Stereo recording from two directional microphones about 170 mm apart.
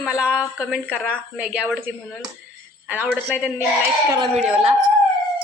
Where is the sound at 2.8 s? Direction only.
5° right (ahead or behind).